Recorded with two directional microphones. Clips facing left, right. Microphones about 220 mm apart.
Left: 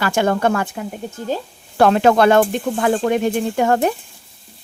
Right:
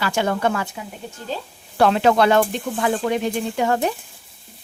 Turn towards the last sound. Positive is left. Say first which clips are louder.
# left 4 dB
turn(degrees=50)  # may be behind; listen again after turning